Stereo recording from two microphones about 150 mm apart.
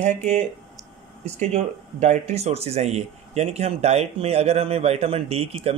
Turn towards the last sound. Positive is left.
turn(degrees=-40)  # may be behind; listen again after turning